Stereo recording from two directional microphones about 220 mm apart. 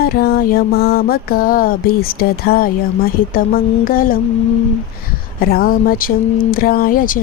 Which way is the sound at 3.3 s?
40° left (ahead or behind).